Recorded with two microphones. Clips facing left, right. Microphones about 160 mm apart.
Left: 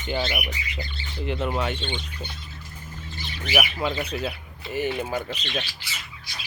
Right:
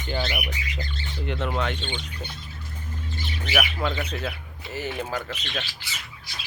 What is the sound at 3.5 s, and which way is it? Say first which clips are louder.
Speech: left 1 dB; 10° left (ahead or behind).